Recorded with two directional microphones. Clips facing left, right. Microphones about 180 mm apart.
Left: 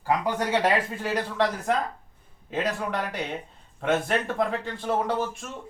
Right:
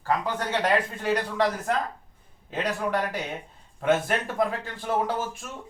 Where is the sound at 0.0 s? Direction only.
15° left (ahead or behind).